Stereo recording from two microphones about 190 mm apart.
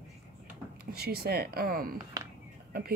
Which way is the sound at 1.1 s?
55° right (ahead or behind).